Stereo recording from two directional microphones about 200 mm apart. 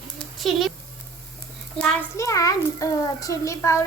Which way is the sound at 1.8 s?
5° left (ahead or behind).